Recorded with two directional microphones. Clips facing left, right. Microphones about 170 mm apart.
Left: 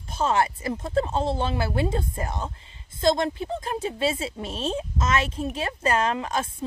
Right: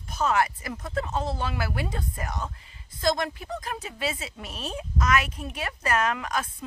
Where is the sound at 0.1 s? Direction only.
30° left (ahead or behind).